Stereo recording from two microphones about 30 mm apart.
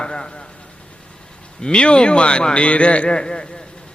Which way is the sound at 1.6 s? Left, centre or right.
Left.